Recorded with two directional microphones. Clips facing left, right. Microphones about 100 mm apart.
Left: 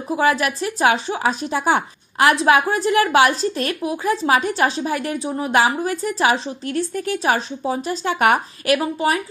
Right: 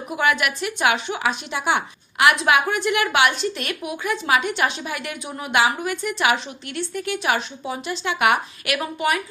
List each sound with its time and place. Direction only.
0.1 s a woman's voice: 35° left (ahead or behind)